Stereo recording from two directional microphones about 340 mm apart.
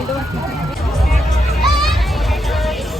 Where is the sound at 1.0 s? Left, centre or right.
Centre.